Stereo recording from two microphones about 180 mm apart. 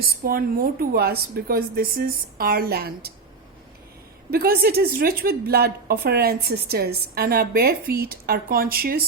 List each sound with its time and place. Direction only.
0.0 s a woman's voice: 55° right (ahead or behind)
4.3 s a woman's voice: 60° right (ahead or behind)